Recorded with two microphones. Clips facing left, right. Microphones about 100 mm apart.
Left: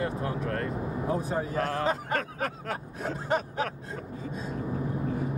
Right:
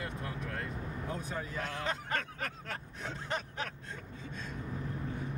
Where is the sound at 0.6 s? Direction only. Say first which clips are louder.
Left 9 dB; 40° left (ahead or behind).